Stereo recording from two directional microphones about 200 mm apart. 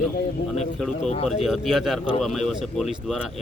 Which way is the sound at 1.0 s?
35° left (ahead or behind).